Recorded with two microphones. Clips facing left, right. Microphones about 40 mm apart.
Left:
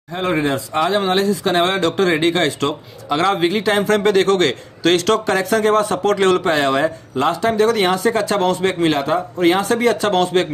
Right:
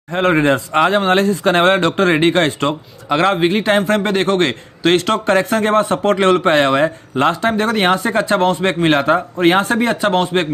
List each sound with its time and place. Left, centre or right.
0.1 s speech: right
5.2 s speech: right
6.4 s speech: right